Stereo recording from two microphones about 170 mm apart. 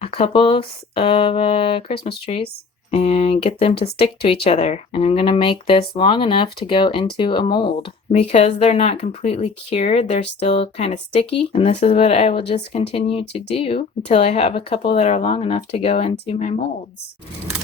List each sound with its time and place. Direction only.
0.0 s speech: 35° left (ahead or behind)